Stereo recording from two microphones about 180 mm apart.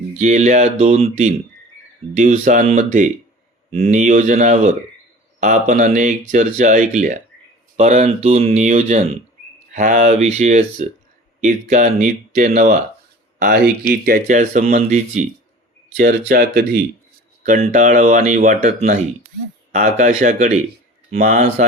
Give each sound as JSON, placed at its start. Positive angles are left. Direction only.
{"t": 0.1, "sound": "speech", "side_deg": -45}
{"t": 13.4, "sound": "speech", "side_deg": -60}
{"t": 16.0, "sound": "speech", "side_deg": -55}
{"t": 17.4, "sound": "speech", "side_deg": -40}